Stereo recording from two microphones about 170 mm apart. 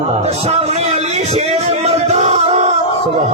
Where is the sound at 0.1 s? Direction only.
40° right (ahead or behind).